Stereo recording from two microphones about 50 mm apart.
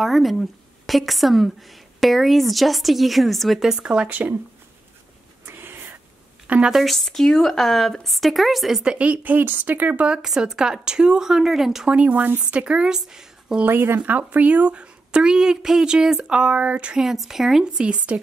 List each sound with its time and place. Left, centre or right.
0.0 s a woman's voice: centre
3.5 s speech: centre
5.4 s a sound: right
6.4 s a woman's voice: right
6.7 s a woman's voice: centre
8.8 s speech: right
10.0 s speech: centre
11.9 s a woman's voice: right; by 13.6 s centre
13.7 s a woman's voice: right
17.0 s speech: centre
17.7 s a woman's voice: right